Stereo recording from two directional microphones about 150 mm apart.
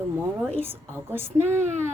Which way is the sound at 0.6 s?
15° right (ahead or behind).